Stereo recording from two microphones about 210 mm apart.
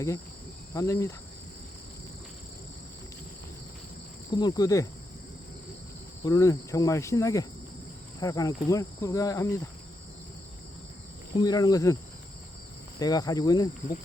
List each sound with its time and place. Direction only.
0.7 s cricket: 15° left (ahead or behind)
4.4 s cricket: 20° left (ahead or behind)
6.2 s cricket: 15° left (ahead or behind)
11.3 s cricket: 20° left (ahead or behind)
13.0 s cricket: 15° left (ahead or behind)